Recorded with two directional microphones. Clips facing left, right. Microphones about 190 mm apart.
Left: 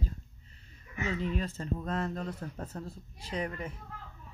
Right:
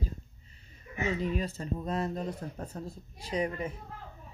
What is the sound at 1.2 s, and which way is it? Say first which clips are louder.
Speech: right 2 dB; 10° right (ahead or behind).